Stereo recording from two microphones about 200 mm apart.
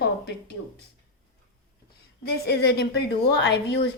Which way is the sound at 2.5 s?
55° left (ahead or behind).